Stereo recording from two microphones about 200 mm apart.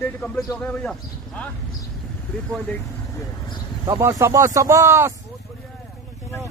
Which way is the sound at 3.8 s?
15° right (ahead or behind).